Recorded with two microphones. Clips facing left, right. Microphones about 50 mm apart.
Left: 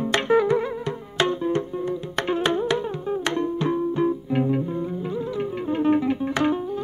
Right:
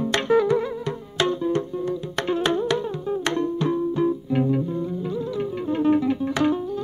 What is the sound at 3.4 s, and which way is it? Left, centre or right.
Music, left.